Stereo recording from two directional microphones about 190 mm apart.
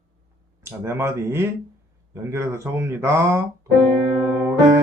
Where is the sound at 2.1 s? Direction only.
15° right (ahead or behind).